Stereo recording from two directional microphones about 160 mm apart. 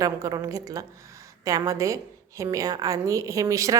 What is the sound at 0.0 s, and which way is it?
A woman's voice, 20° right (ahead or behind).